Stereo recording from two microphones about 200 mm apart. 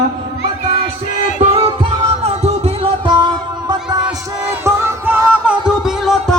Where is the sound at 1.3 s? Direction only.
30° right (ahead or behind).